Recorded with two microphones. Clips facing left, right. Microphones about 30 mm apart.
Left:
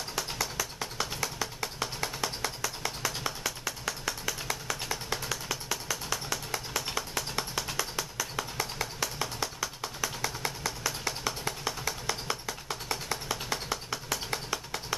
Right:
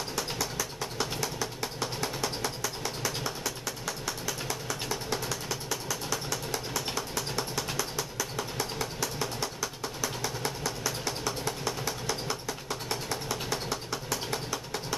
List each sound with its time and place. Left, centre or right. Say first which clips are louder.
0.1 s music: left 2 dB; centre
3.4 s music: even; left
5.5 s a sound: even; centre
7.0 s music: right 1 dB; centre
8.2 s a sound: even; centre
14.3 s music: right 1 dB; centre